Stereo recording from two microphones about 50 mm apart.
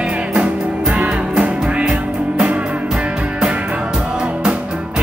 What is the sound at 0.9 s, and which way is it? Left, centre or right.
Music, right.